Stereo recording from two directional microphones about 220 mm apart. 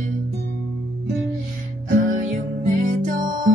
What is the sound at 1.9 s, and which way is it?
Music, 35° right (ahead or behind).